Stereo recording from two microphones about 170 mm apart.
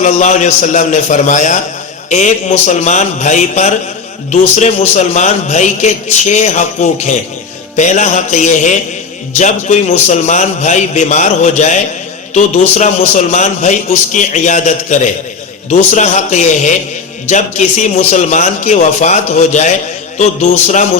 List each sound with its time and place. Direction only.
0.0 s a man's voice: 45° left (ahead or behind)